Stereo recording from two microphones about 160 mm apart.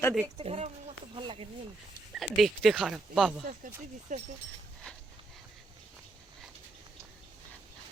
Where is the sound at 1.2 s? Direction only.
35° right (ahead or behind).